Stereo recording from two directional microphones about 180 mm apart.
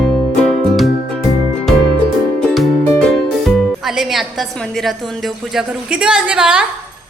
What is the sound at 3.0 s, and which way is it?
A woman's voice, centre (ahead or behind).